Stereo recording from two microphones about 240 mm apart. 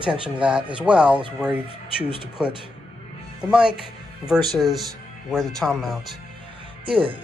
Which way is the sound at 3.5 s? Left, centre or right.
Centre.